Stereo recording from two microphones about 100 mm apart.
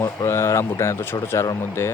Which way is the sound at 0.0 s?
30° left (ahead or behind).